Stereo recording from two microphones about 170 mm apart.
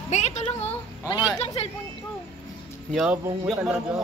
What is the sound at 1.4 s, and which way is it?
Speech, 35° left (ahead or behind).